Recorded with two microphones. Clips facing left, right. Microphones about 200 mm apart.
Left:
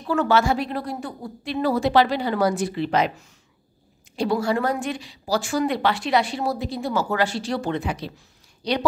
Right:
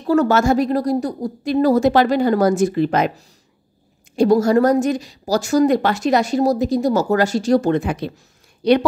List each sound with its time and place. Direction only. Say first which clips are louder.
0.0 s a woman's voice: right 5 dB; 40° right (ahead or behind); by 8.8 s 55° right (ahead or behind)